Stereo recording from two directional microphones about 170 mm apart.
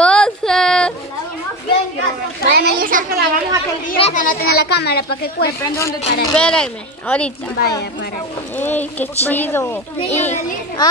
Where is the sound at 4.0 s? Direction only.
40° left (ahead or behind).